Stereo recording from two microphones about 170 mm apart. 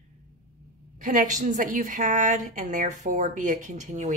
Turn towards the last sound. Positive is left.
turn(degrees=-45)  # may be behind; listen again after turning